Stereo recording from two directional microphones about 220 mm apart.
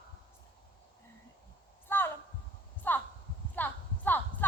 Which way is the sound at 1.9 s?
10° left (ahead or behind).